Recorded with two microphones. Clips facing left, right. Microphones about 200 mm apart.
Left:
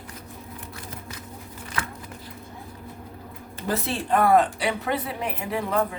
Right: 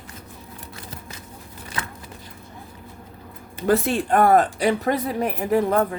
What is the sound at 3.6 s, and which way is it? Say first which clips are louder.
Speech: right 6 dB; 55° right (ahead or behind).